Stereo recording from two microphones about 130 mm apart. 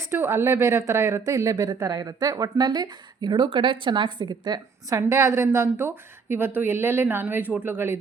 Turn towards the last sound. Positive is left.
turn(degrees=-15)  # may be behind; listen again after turning